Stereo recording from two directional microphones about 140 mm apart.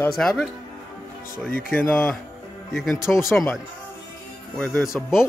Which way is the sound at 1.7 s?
15° left (ahead or behind).